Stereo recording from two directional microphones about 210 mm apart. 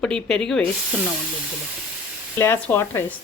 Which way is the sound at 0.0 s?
5° left (ahead or behind).